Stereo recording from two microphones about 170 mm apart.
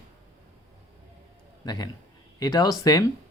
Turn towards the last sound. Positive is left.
turn(degrees=20)  # may be behind; listen again after turning